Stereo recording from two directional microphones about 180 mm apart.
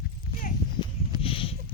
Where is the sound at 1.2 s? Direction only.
30° left (ahead or behind).